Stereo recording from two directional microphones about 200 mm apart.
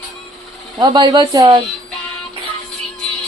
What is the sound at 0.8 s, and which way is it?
Speech, 20° right (ahead or behind).